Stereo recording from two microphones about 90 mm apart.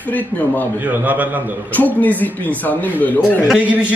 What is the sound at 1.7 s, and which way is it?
Speech, 20° left (ahead or behind).